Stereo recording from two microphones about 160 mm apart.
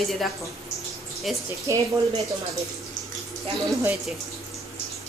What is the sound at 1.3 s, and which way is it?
Speech, centre (ahead or behind).